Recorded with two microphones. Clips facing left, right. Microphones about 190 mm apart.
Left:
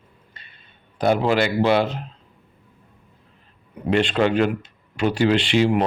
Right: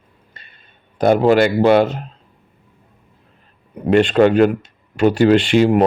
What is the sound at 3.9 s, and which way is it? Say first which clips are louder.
Speech: right 7 dB; 45° right (ahead or behind).